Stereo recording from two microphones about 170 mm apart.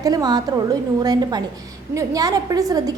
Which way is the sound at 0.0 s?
20° right (ahead or behind).